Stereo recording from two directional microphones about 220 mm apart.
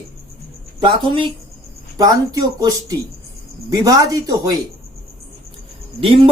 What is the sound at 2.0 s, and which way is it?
Speech, 15° right (ahead or behind).